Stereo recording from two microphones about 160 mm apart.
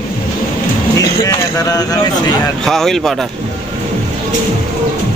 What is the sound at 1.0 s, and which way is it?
Speech, 20° left (ahead or behind).